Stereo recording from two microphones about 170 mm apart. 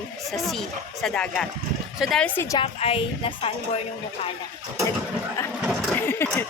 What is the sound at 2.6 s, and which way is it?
Speech, 35° left (ahead or behind).